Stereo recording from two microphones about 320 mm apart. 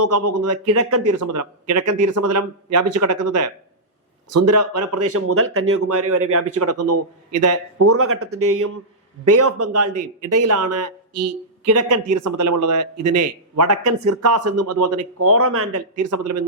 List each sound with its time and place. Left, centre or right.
0.0 s a man's voice: right
1.2 s a man's voice: right
12.1 s a man's voice: right